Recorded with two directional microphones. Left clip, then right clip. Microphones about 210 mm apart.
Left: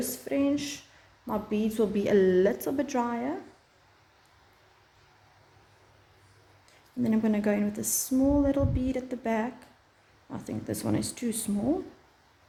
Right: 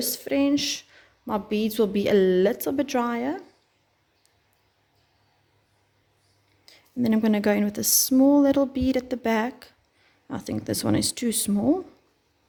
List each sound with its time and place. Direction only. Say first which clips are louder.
0.0 s a woman's voice: right 4 dB; 40° right (ahead or behind)
6.7 s speech: right 5 dB; 40° right (ahead or behind)